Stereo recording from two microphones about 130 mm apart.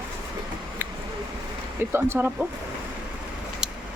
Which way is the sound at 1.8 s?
15° right (ahead or behind).